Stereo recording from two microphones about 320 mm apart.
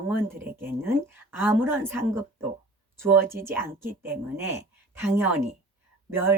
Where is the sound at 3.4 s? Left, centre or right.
Right.